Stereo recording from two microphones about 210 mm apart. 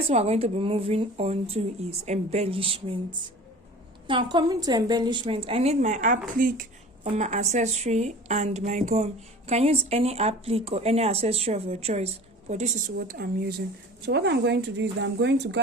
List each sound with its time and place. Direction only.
0.1 s a woman's voice: 30° right (ahead or behind); by 15.6 s 55° right (ahead or behind)